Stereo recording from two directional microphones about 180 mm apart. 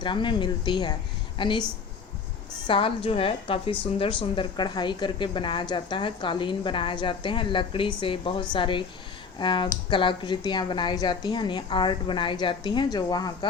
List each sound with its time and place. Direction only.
0.0 s a woman's voice: 25° left (ahead or behind)
2.6 s a woman's voice: 30° left (ahead or behind)